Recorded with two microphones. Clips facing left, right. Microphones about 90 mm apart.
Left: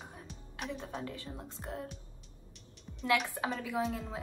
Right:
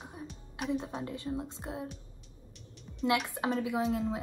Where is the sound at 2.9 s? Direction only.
Centre (ahead or behind).